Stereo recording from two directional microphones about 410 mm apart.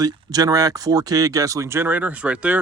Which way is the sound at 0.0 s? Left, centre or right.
Centre.